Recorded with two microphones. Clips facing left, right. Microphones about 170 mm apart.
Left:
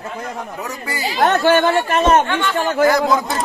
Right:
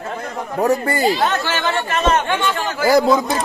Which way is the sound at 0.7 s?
55° right (ahead or behind).